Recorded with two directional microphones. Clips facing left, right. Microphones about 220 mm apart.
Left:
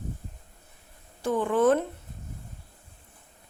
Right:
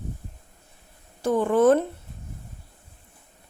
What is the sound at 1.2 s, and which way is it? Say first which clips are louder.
Speech: right 4 dB; 40° right (ahead or behind).